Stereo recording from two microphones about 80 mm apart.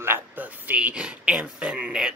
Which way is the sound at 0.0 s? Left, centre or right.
Right.